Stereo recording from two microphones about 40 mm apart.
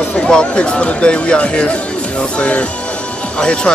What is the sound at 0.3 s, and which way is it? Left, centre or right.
Speech, left.